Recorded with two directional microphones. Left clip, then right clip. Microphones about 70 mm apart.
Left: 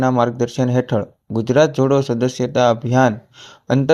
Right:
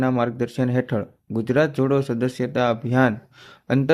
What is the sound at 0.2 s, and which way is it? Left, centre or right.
Speech, left.